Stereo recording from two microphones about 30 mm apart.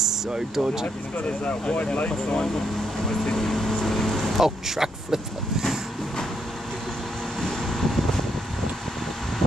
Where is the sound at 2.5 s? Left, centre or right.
Centre.